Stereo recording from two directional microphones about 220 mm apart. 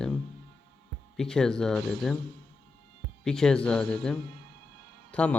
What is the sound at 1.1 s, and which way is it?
Speech, centre (ahead or behind).